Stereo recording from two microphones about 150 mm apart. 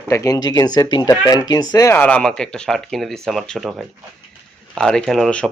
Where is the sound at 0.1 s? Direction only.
20° left (ahead or behind).